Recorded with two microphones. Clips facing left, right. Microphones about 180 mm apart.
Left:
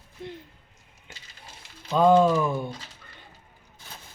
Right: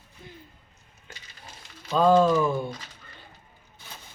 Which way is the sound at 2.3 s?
Centre (ahead or behind).